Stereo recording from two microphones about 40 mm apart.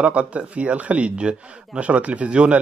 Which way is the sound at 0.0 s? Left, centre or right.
Right.